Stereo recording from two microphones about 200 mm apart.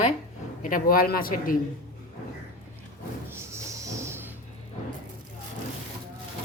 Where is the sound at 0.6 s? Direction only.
45° left (ahead or behind).